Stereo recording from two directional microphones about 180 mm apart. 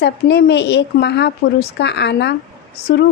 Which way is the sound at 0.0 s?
70° left (ahead or behind).